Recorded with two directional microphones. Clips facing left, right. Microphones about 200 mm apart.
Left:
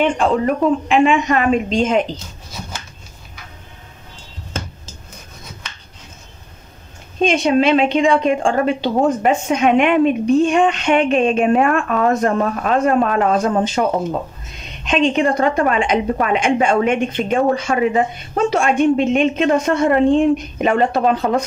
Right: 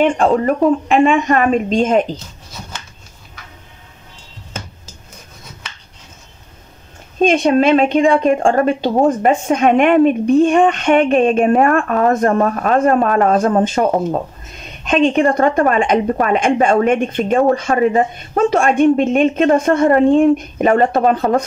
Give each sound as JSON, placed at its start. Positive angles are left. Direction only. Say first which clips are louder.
{"t": 0.8, "sound": "a woman's voice", "louder": "right 2 dB", "side_deg": -50}
{"t": 7.2, "sound": "a woman's voice", "louder": "right 2 dB", "side_deg": -50}